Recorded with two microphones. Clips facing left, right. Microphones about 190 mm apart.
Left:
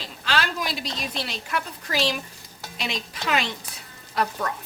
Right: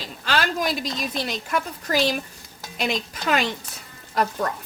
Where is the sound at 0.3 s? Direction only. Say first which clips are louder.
Right 3 dB; 45° right (ahead or behind).